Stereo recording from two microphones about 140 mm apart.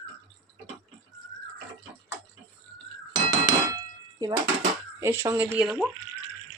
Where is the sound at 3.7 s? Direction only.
30° right (ahead or behind).